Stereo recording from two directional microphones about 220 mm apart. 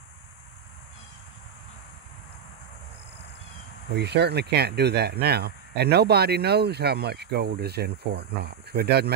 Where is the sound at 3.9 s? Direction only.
50° right (ahead or behind).